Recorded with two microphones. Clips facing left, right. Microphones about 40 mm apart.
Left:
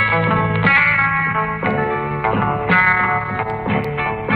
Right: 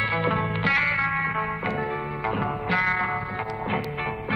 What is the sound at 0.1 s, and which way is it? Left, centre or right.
Music, left.